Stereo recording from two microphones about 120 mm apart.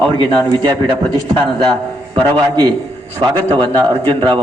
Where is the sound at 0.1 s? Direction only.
40° right (ahead or behind).